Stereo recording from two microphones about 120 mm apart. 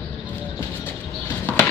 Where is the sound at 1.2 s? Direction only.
20° left (ahead or behind).